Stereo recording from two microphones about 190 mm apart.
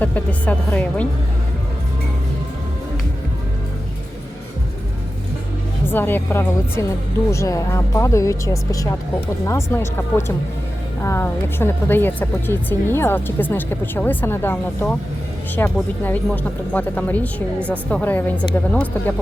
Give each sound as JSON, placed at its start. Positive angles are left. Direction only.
{"t": 0.0, "sound": "a woman's voice", "side_deg": 10}
{"t": 5.9, "sound": "a woman's voice", "side_deg": 10}